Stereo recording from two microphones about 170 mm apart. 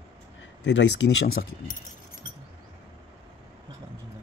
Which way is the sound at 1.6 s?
55° left (ahead or behind).